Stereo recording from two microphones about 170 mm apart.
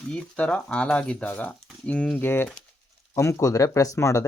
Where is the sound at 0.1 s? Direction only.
5° left (ahead or behind).